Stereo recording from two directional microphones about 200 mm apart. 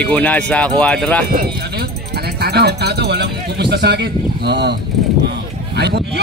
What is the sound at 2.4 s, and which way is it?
Speech, 55° right (ahead or behind).